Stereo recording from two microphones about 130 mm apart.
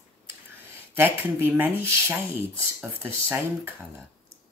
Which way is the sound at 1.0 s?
15° right (ahead or behind).